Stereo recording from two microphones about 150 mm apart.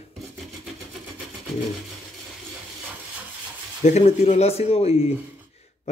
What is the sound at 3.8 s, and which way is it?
Speech, 45° left (ahead or behind).